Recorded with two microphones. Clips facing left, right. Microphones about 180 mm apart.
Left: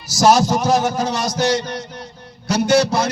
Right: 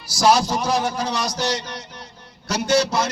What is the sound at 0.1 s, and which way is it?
A man's voice, 45° left (ahead or behind).